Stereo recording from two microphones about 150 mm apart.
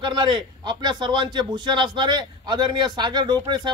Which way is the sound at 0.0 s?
30° right (ahead or behind).